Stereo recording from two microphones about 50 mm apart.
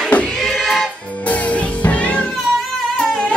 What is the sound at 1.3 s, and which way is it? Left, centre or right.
Music, left.